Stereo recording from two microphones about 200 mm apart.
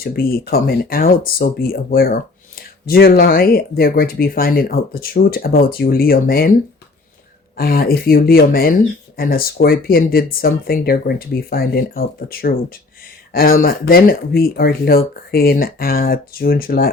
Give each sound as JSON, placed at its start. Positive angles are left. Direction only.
{"t": 0.0, "sound": "speech", "side_deg": 50}
{"t": 7.5, "sound": "speech", "side_deg": 50}